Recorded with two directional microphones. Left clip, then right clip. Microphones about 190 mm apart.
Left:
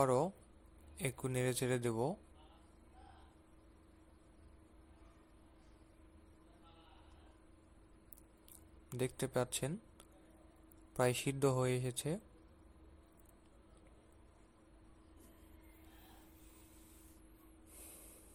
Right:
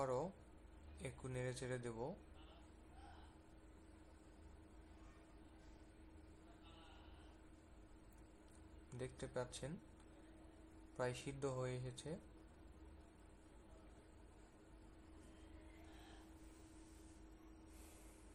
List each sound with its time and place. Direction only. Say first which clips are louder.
0.0 s a sound: left 10 dB; 40° left (ahead or behind)
1.0 s speech: left 10 dB; 40° left (ahead or behind)
8.9 s speech: left 11 dB; 40° left (ahead or behind)
10.9 s speech: left 10 dB; 40° left (ahead or behind)